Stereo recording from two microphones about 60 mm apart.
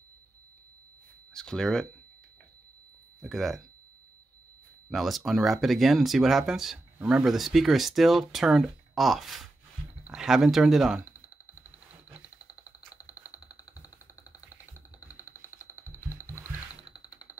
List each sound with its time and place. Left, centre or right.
1.3 s speech: centre
3.2 s speech: centre
4.8 s speech: centre
7.0 s speech: centre
7.2 s speech: centre
12.9 s a sound: left
15.2 s music: left
16.3 s a sound: right